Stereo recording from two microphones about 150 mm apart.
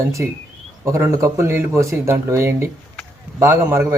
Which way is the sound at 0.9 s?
20° right (ahead or behind).